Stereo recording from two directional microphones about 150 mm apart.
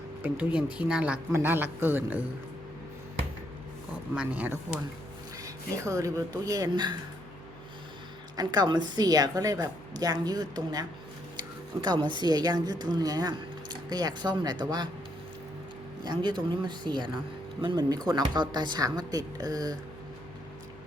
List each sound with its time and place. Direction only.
0.2 s speech: 10° right (ahead or behind)
4.1 s speech: 10° right (ahead or behind)
5.4 s speech: 20° right (ahead or behind)
8.4 s a woman's voice: 25° right (ahead or behind)
16.0 s a woman's voice: 30° right (ahead or behind)